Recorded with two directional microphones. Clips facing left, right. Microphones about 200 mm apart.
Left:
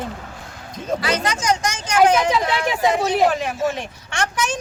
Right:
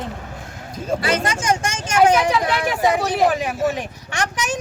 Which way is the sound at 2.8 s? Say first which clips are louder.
Even; 15° right (ahead or behind).